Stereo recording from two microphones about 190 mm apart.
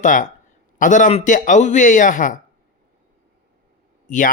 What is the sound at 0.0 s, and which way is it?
Speech, 45° left (ahead or behind).